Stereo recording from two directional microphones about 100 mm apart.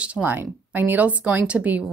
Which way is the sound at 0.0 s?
15° right (ahead or behind).